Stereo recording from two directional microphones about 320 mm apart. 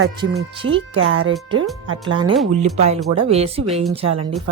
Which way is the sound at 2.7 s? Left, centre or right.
Centre.